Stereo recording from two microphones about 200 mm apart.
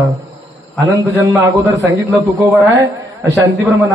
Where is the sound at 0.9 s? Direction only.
15° right (ahead or behind).